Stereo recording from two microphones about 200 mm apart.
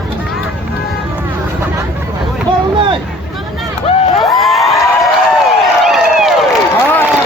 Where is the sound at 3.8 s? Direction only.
30° left (ahead or behind).